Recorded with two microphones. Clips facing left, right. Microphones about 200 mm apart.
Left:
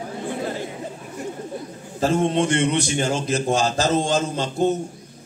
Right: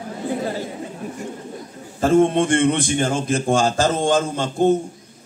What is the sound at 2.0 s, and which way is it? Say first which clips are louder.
A man's voice: right 4 dB; 55° right (ahead or behind).